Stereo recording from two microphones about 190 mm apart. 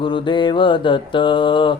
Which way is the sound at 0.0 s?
25° left (ahead or behind).